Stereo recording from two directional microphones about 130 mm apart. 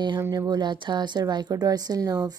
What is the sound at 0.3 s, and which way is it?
Speech, 30° right (ahead or behind).